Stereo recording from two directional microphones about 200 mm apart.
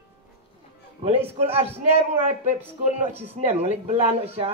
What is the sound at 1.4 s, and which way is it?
Speech, 30° right (ahead or behind).